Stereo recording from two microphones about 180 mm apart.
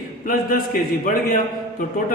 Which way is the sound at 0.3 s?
50° left (ahead or behind).